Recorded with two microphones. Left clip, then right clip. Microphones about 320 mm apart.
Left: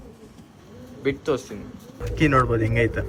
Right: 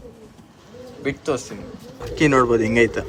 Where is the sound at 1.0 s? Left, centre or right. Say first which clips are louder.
Even; centre.